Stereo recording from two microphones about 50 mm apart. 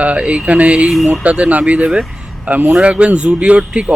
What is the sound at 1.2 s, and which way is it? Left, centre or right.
A man's voice, right.